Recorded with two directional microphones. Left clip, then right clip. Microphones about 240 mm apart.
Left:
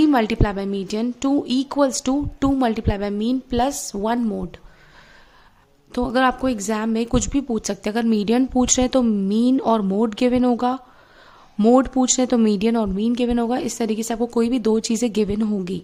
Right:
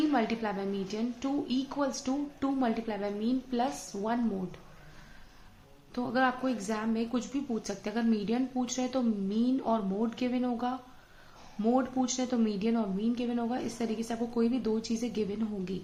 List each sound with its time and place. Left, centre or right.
0.1 s a woman's voice: left
5.9 s a woman's voice: left